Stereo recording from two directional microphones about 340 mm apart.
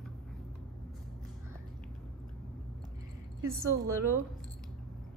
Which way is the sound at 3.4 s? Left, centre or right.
Centre.